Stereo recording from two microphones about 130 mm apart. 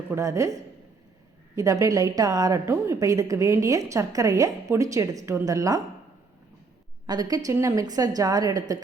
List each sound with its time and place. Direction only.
0.1 s a woman's voice: 25° right (ahead or behind)
7.1 s a woman's voice: 30° right (ahead or behind)